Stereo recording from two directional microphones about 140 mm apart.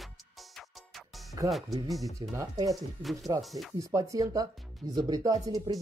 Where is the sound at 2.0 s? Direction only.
25° right (ahead or behind).